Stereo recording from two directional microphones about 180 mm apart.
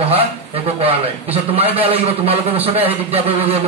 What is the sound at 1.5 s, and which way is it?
Speech, 35° right (ahead or behind).